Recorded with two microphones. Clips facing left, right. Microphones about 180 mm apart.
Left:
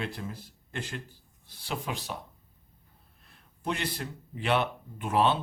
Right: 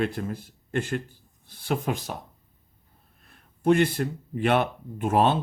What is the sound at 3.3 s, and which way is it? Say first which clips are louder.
Speech: right 13 dB; 50° right (ahead or behind).